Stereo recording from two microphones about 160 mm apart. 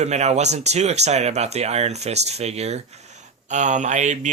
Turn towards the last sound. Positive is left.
turn(degrees=-50)  # may be behind; listen again after turning